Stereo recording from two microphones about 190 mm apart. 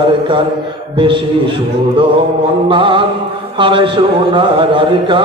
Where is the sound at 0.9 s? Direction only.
25° right (ahead or behind).